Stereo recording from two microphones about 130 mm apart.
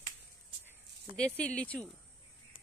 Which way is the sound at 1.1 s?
10° left (ahead or behind).